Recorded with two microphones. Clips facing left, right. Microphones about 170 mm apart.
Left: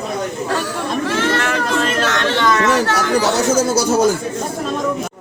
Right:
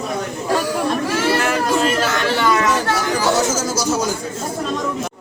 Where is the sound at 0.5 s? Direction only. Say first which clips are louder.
Right 5 dB; 10° right (ahead or behind).